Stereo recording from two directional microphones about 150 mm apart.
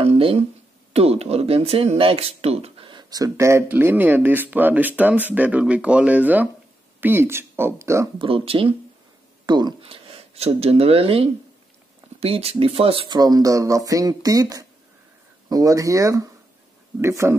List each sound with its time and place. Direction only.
0.0 s a sound: 40° right (ahead or behind)
0.9 s speech: 45° right (ahead or behind); by 8.1 s 20° right (ahead or behind)
8.2 s speech: 35° right (ahead or behind); by 17.4 s 15° right (ahead or behind)